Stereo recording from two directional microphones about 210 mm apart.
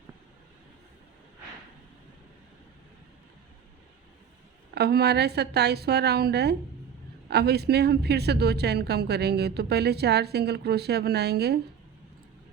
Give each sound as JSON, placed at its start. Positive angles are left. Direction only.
{"t": 4.7, "sound": "speech", "side_deg": -50}